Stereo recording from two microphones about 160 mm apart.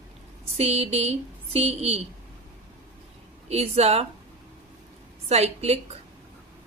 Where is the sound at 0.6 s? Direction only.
40° right (ahead or behind).